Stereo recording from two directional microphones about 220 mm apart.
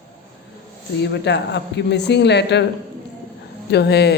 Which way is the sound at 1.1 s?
50° left (ahead or behind).